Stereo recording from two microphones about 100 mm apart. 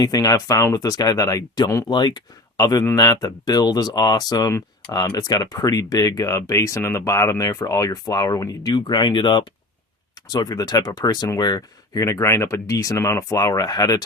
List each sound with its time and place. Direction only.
0.0 s speech: 35° left (ahead or behind)
1.9 s speech: 45° left (ahead or behind)
11.9 s speech: 30° left (ahead or behind)